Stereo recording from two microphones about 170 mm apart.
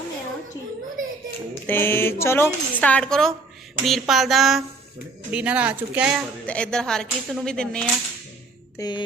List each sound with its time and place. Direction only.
1.6 s speech: 15° left (ahead or behind); by 6.2 s 5° right (ahead or behind)
6.4 s speech: 5° left (ahead or behind)
8.8 s music: 25° left (ahead or behind)